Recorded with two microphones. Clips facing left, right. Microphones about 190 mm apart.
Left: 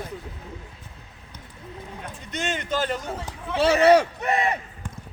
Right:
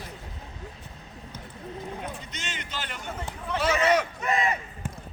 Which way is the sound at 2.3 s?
55° left (ahead or behind).